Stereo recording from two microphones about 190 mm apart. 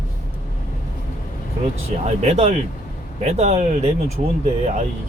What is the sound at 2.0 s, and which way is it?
Speech, 35° right (ahead or behind).